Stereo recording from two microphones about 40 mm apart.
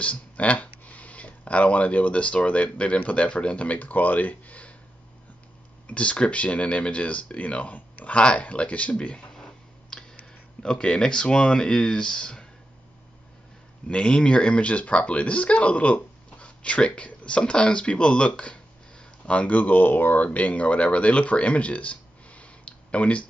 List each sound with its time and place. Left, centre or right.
0.0 s speech: left
5.9 s speech: left
9.4 s tick: centre
10.6 s speech: left
13.8 s speech: left
18.9 s a sound: left
19.4 s speech: left